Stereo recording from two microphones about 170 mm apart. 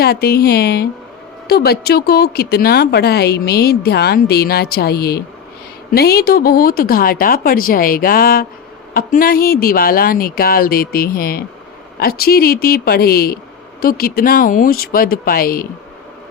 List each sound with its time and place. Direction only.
0.0 s a woman's voice: 65° left (ahead or behind)